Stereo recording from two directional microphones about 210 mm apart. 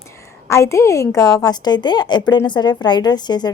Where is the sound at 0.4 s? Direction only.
15° left (ahead or behind).